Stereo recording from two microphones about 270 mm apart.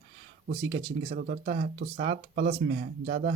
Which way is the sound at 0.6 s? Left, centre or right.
Centre.